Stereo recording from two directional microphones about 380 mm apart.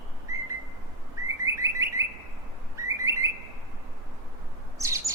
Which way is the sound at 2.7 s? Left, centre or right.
Centre.